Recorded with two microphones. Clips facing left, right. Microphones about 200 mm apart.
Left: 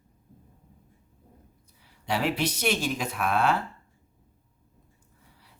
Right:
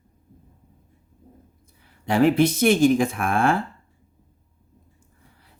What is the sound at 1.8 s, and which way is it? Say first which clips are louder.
Speech: right 10 dB; 50° right (ahead or behind).